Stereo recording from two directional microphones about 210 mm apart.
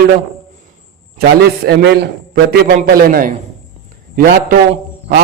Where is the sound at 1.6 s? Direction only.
50° right (ahead or behind).